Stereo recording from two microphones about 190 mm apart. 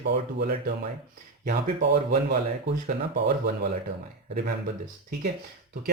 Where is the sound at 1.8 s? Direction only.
60° right (ahead or behind).